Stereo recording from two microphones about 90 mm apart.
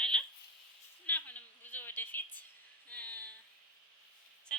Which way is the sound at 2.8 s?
15° left (ahead or behind).